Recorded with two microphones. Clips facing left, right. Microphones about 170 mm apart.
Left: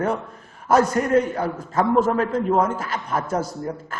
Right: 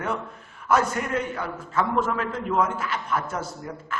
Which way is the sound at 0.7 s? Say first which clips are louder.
Left 6 dB; 40° left (ahead or behind).